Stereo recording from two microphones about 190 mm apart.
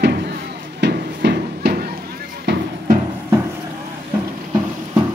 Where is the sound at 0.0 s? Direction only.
60° right (ahead or behind).